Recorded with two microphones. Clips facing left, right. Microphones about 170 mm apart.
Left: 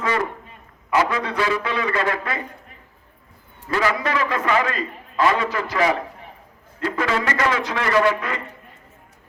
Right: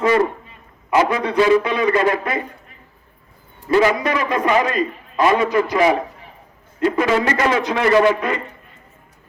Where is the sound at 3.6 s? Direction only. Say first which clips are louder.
Right 6 dB; 20° right (ahead or behind).